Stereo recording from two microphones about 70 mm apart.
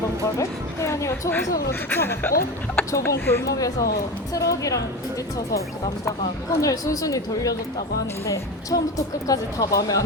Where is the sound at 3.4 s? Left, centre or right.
Left.